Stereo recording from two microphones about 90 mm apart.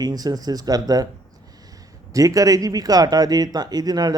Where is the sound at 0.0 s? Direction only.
45° right (ahead or behind).